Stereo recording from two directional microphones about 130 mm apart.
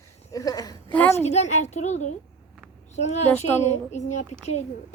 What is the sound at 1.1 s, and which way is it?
A child's voice, 60° left (ahead or behind).